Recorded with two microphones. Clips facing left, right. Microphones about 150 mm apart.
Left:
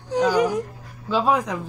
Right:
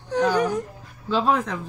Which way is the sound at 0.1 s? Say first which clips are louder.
Left 2 dB; 10° left (ahead or behind).